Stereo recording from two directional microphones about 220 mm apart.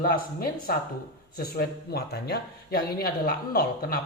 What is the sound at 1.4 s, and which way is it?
Speech, 45° left (ahead or behind).